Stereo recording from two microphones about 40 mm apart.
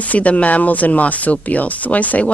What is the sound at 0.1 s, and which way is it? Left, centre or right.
Speech, left.